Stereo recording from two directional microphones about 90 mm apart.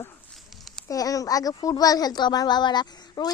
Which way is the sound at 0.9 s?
40° left (ahead or behind).